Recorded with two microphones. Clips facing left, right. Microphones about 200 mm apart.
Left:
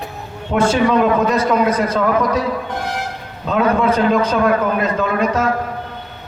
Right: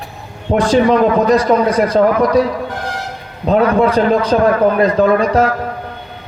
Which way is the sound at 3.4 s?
35° right (ahead or behind).